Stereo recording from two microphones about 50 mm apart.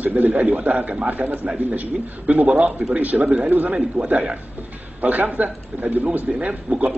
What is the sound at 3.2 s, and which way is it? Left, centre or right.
A man's voice, right.